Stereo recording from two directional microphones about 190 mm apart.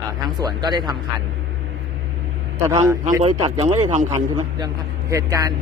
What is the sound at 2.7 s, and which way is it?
Speech, 15° right (ahead or behind).